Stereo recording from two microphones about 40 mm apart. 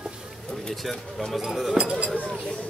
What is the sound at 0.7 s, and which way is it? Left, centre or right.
Speech, centre.